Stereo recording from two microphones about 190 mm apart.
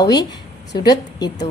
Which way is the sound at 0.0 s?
20° left (ahead or behind).